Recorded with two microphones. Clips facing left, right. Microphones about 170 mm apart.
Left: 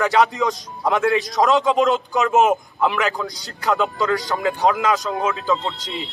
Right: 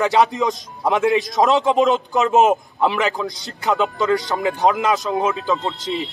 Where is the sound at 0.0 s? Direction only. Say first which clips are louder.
Right 1 dB; 20° right (ahead or behind).